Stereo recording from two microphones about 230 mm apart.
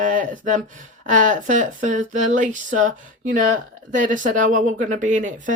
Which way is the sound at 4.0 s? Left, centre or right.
Right.